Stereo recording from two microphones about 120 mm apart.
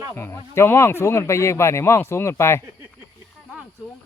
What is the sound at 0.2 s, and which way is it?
Speech, 20° left (ahead or behind).